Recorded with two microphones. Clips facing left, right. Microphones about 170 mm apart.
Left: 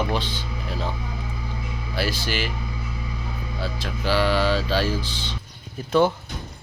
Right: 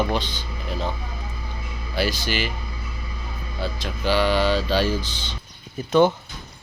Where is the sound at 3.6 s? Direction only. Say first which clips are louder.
Right 2 dB; centre (ahead or behind).